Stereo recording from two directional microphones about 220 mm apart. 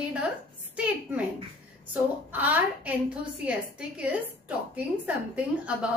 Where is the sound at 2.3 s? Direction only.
5° right (ahead or behind).